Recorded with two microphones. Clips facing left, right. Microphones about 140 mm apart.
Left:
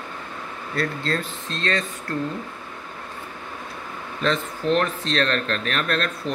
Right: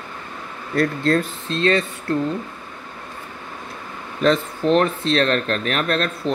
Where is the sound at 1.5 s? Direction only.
30° right (ahead or behind).